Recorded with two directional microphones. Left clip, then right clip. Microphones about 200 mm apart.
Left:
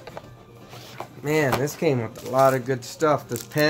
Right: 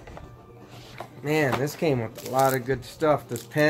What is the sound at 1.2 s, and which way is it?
Speech, centre (ahead or behind).